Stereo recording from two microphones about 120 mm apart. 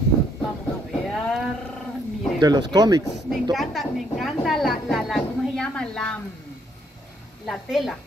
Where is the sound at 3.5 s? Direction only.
Centre (ahead or behind).